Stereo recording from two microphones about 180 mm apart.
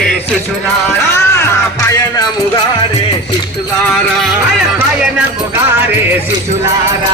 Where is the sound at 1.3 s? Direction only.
15° left (ahead or behind).